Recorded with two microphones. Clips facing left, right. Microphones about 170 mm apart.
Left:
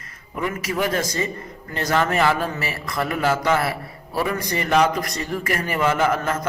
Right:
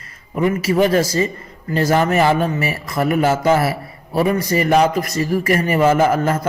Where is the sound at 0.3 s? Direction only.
30° right (ahead or behind).